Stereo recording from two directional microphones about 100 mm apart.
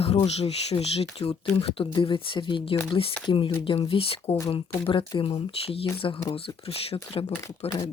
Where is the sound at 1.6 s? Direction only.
65° left (ahead or behind).